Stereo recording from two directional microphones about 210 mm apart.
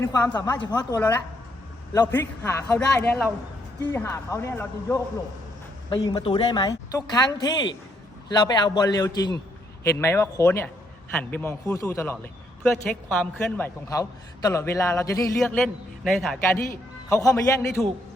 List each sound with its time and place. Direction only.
0.0 s a man's voice: 15° left (ahead or behind)
15.4 s a man's voice: centre (ahead or behind)
17.1 s a man's voice: 15° left (ahead or behind)